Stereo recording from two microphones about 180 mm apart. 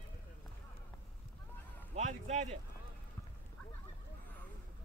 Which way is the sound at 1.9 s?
40° right (ahead or behind).